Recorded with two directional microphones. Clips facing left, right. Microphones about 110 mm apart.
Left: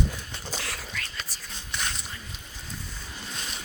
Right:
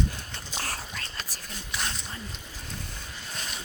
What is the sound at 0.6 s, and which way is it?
Whispering, 35° right (ahead or behind).